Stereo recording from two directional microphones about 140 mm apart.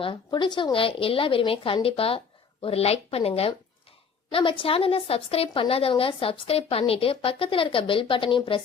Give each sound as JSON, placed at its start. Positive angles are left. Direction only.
{"t": 0.0, "sound": "a woman's voice", "side_deg": 35}